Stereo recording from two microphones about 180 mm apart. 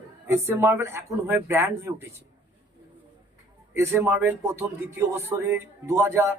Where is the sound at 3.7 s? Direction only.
15° right (ahead or behind).